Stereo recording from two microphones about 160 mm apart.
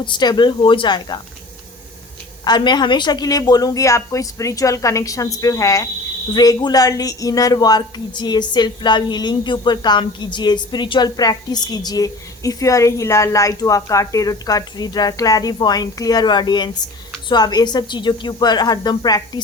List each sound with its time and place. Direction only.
0.0 s speech: 30° left (ahead or behind)
2.4 s speech: 25° left (ahead or behind)